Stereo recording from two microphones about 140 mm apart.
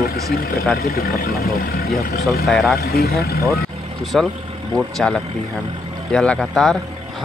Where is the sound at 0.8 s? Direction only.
90° left.